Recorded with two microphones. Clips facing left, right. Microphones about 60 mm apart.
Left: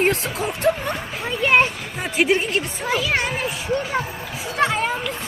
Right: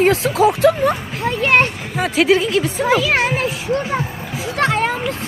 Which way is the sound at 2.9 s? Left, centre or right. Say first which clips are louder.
Right 5 dB; right.